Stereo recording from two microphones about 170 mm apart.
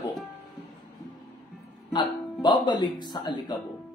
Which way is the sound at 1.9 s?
25° left (ahead or behind).